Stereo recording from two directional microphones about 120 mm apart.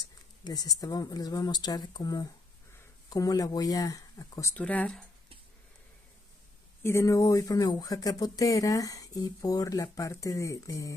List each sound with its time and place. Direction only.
0.4 s speech: 30° left (ahead or behind)
4.6 s speech: 10° left (ahead or behind)
6.8 s speech: 20° left (ahead or behind)